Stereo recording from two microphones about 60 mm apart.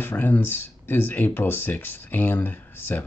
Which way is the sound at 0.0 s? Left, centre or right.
Left.